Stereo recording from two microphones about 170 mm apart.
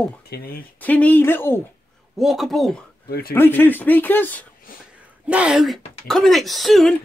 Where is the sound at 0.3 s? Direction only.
70° left (ahead or behind).